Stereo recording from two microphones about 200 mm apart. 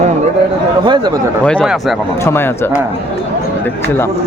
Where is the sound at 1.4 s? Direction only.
Centre (ahead or behind).